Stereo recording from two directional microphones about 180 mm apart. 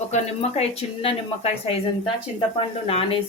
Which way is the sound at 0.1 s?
35° left (ahead or behind).